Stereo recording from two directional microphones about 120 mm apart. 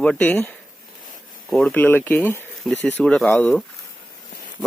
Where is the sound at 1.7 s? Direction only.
15° left (ahead or behind).